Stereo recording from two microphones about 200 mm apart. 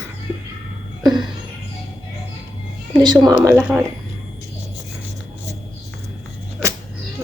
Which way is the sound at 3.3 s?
15° right (ahead or behind).